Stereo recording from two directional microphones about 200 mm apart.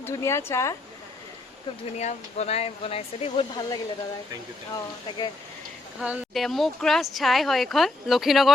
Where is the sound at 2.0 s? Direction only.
35° left (ahead or behind).